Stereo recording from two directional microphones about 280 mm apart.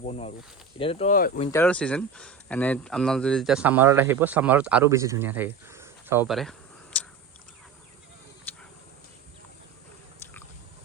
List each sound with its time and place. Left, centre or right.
0.0 s speech: left
1.5 s speech: centre